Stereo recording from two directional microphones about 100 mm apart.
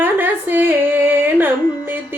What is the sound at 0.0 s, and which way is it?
Music, 20° right (ahead or behind).